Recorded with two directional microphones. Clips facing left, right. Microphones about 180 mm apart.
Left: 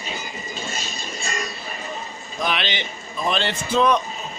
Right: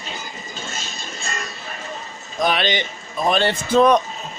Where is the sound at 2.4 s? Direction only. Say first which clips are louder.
Right 5 dB; 40° right (ahead or behind).